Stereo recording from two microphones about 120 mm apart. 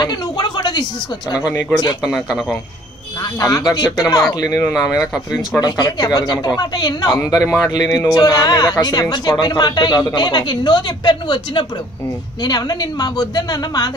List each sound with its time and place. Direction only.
0.0 s a sound: 35° left (ahead or behind)
2.0 s a man's voice: centre (ahead or behind)
3.3 s speech: 30° left (ahead or behind)
4.6 s speech: 15° left (ahead or behind)
5.6 s a man's voice: 35° left (ahead or behind)